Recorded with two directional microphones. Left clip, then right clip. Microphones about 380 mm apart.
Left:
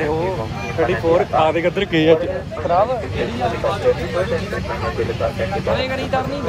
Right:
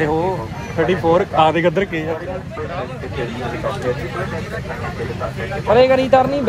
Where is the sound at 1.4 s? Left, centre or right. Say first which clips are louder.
Right 2 dB; right.